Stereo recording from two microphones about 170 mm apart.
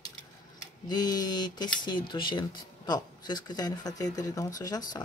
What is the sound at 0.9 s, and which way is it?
Speech, 25° left (ahead or behind).